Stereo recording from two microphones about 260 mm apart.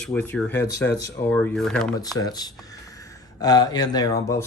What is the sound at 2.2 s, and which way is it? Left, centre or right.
Speech, centre.